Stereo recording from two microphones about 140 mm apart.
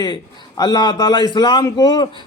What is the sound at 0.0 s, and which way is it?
A man's voice, 30° left (ahead or behind).